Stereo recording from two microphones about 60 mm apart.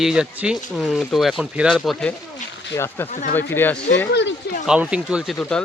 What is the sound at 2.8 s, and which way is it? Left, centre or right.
Speech, left.